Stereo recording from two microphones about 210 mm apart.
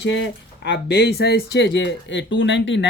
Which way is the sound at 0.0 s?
55° left (ahead or behind).